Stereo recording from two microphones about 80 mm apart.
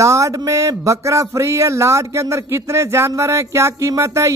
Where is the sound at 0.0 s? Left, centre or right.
Right.